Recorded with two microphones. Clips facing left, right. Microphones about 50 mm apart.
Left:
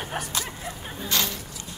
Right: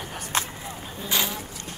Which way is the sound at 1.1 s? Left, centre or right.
Centre.